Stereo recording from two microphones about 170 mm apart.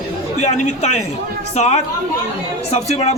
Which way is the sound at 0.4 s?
40° left (ahead or behind).